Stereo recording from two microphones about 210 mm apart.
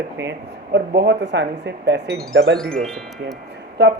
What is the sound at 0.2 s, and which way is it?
Speech, 55° right (ahead or behind).